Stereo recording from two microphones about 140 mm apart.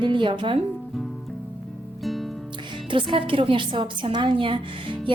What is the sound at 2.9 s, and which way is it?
Speech, 40° right (ahead or behind).